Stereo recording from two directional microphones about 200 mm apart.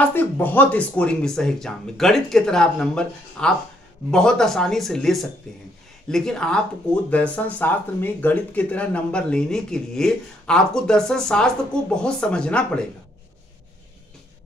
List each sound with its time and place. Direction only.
0.0 s speech: 10° left (ahead or behind)